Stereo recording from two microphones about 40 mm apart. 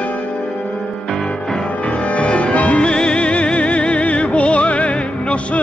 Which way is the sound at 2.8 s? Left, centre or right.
Left.